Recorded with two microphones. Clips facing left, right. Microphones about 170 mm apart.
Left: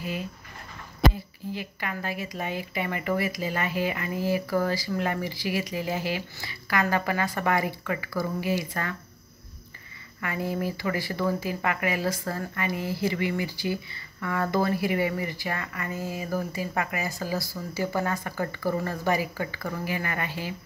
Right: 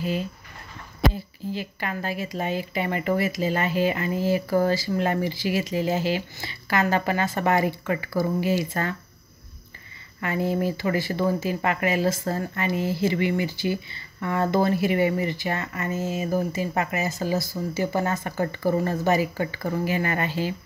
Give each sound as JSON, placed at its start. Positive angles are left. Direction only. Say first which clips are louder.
{"t": 1.5, "sound": "speech", "louder": "right 3 dB", "side_deg": -30}
{"t": 10.2, "sound": "speech", "louder": "right 5 dB", "side_deg": -25}